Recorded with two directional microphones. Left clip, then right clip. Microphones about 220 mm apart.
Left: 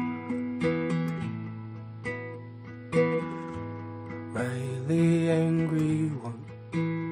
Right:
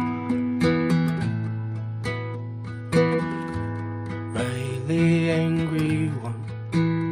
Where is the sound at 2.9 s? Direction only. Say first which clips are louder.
Right 4 dB; 35° right (ahead or behind).